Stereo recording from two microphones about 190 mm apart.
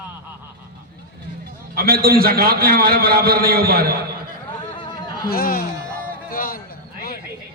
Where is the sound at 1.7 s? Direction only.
50° right (ahead or behind).